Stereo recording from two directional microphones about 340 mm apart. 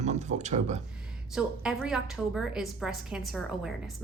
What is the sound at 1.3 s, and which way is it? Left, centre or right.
A woman's voice, centre.